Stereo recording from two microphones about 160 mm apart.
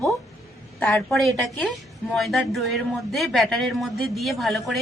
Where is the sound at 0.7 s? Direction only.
5° left (ahead or behind).